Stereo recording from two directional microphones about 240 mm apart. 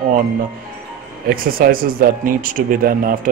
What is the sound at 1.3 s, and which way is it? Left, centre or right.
Speech, right.